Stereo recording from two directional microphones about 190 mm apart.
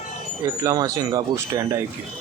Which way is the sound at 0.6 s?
20° right (ahead or behind).